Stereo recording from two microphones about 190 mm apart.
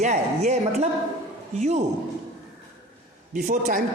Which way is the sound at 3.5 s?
40° right (ahead or behind).